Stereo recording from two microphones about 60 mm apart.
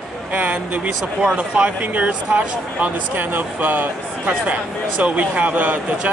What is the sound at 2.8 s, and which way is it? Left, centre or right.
Speech, right.